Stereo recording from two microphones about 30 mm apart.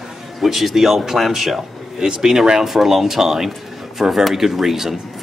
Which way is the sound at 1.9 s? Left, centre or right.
Right.